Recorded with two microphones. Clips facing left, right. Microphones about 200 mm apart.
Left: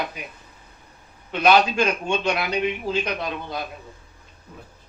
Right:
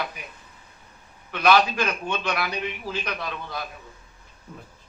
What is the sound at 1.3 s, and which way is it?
A man's voice, 25° left (ahead or behind).